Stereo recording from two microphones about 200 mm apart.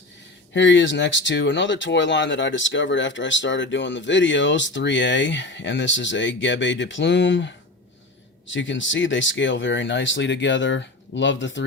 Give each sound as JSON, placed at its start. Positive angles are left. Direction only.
{"t": 0.5, "sound": "speech", "side_deg": 65}